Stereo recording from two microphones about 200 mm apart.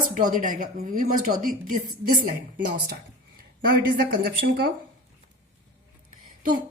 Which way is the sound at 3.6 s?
45° right (ahead or behind).